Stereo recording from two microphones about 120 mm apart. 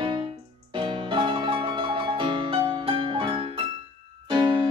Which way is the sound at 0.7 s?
45° right (ahead or behind).